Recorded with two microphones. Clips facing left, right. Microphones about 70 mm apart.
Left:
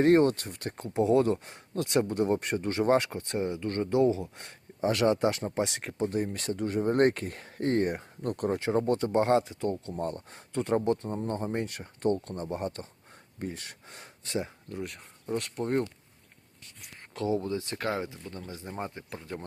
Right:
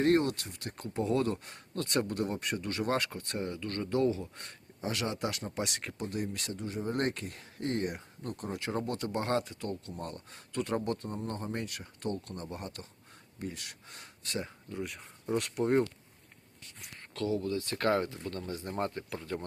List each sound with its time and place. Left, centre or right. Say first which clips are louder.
0.0 s speech: left 5 dB; left
0.8 s speech: left 6 dB; left
2.0 s speech: left 6 dB; left
4.9 s speech: left 9 dB; left
6.6 s speech: left 9 dB; left
8.9 s speech: left 8 dB; left
14.7 s speech: left 1 dB; centre
15.4 s speech: right 2 dB; right
17.2 s speech: left 2 dB; left
17.7 s speech: right 3 dB; centre
19.1 s speech: right 2 dB; left